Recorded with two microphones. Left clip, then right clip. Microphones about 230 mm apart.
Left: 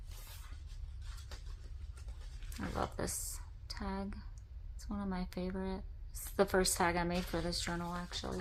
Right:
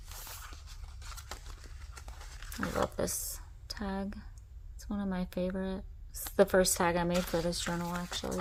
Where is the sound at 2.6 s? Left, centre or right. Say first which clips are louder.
Right 6 dB; right.